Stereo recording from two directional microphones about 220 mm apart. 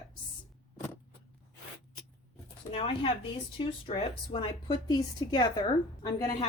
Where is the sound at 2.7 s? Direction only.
25° left (ahead or behind).